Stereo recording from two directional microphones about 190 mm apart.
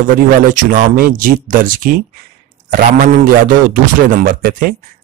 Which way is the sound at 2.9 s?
45° right (ahead or behind).